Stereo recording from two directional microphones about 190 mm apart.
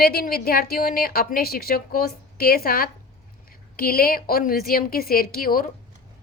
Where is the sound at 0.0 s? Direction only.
55° left (ahead or behind).